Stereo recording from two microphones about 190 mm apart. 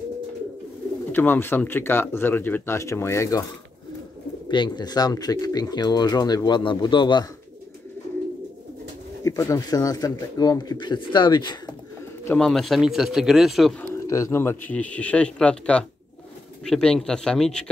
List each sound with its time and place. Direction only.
1.1 s speech: 10° left (ahead or behind)
4.5 s speech: 25° left (ahead or behind)
9.2 s speech: 15° left (ahead or behind)
12.3 s speech: centre (ahead or behind)